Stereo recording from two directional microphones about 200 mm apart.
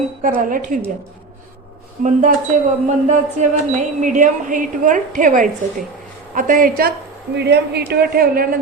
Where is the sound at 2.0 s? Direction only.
40° right (ahead or behind).